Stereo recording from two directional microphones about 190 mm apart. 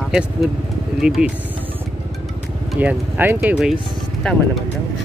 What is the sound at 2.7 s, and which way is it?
Speech, 10° right (ahead or behind).